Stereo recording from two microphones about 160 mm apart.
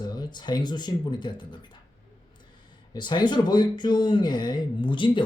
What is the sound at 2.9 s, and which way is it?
Speech, 25° left (ahead or behind).